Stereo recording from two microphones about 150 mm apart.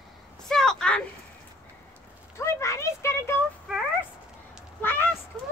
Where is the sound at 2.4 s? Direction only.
20° left (ahead or behind).